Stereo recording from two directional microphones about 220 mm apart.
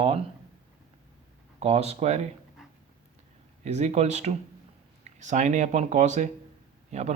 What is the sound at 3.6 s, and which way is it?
Speech, 30° right (ahead or behind).